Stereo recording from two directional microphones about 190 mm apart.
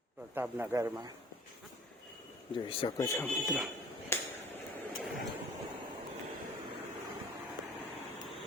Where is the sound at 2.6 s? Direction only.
25° left (ahead or behind).